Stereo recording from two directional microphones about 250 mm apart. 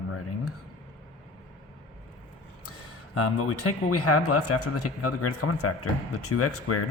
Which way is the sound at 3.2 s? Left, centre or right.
Left.